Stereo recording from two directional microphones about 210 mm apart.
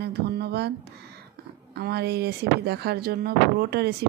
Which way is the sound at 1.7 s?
50° right (ahead or behind).